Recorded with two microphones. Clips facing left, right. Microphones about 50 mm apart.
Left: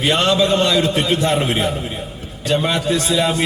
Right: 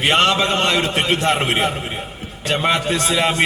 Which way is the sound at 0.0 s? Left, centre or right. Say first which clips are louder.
Even; right.